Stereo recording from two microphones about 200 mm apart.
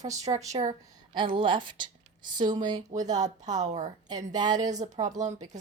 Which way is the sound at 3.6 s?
35° right (ahead or behind).